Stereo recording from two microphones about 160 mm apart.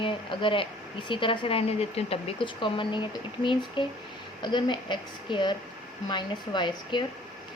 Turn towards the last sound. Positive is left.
turn(degrees=30)  # may be behind; listen again after turning